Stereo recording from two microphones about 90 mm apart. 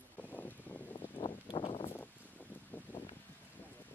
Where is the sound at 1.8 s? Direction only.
20° left (ahead or behind).